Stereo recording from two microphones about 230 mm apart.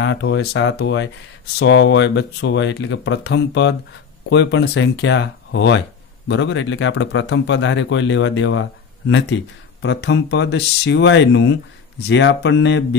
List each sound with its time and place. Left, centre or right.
0.0 s speech: left